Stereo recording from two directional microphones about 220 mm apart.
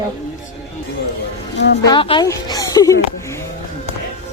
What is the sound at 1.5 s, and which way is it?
Speech, 55° left (ahead or behind).